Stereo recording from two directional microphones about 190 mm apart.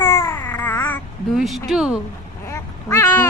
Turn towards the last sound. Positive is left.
turn(degrees=15)  # may be behind; listen again after turning